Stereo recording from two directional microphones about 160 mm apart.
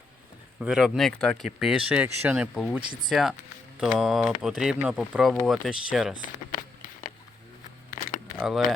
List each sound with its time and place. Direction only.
0.6 s speech: 5° right (ahead or behind)
6.2 s a sound: 55° left (ahead or behind)
8.4 s speech: centre (ahead or behind)